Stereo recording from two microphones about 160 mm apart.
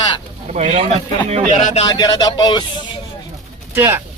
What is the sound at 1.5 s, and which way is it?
Speech, 45° left (ahead or behind).